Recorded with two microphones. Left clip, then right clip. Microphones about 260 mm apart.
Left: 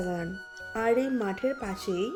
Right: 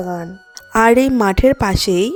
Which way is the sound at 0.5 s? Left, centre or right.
Right.